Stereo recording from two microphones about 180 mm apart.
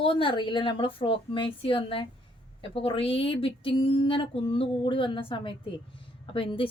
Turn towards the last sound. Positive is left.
turn(degrees=30)  # may be behind; listen again after turning